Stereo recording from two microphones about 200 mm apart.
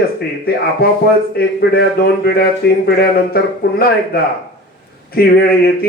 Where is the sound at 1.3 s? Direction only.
50° left (ahead or behind).